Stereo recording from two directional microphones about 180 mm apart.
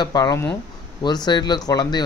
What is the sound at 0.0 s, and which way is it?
Speech, 20° left (ahead or behind).